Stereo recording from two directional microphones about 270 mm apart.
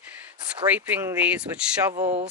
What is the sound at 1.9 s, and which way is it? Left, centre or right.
Speech, right.